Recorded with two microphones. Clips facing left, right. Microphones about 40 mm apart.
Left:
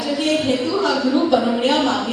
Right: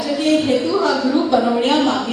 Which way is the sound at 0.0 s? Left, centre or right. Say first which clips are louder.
Right 3 dB; centre.